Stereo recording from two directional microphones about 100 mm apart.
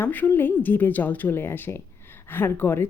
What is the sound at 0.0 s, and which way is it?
Speech, 20° left (ahead or behind).